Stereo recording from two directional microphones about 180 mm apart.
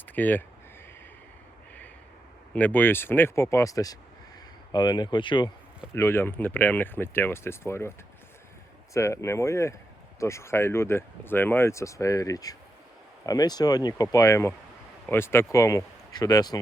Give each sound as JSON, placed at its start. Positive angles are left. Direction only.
{"t": 0.2, "sound": "speech", "side_deg": 10}
{"t": 2.5, "sound": "speech", "side_deg": 10}
{"t": 5.9, "sound": "speech", "side_deg": 15}